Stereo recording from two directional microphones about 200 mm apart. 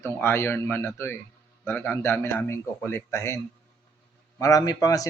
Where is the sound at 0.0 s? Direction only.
15° left (ahead or behind).